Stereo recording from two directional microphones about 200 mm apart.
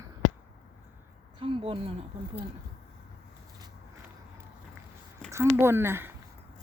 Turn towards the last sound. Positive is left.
turn(degrees=-10)  # may be behind; listen again after turning